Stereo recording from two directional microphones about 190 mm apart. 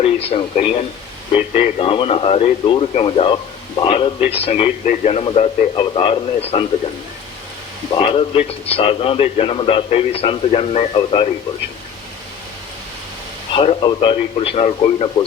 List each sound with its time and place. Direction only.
0.3 s a man's voice: 30° left (ahead or behind)
7.9 s a man's voice: 30° left (ahead or behind)
13.6 s speech: 25° left (ahead or behind)